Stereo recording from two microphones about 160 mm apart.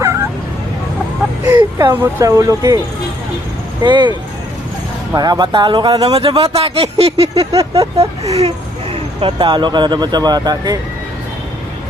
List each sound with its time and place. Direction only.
1.5 s speech: 10° right (ahead or behind)
3.8 s speech: 30° right (ahead or behind)
5.1 s a sound: 25° right (ahead or behind)